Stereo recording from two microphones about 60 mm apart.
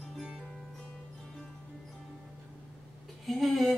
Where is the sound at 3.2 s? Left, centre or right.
Centre.